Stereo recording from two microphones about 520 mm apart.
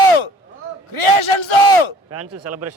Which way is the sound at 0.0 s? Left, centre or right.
Left.